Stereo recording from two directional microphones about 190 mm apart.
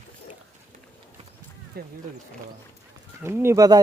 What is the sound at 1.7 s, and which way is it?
Wild animals, 55° right (ahead or behind).